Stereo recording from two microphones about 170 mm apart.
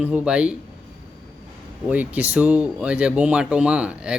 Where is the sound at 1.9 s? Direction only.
10° right (ahead or behind).